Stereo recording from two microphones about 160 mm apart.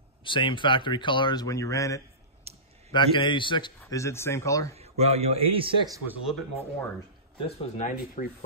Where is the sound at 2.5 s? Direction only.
40° right (ahead or behind).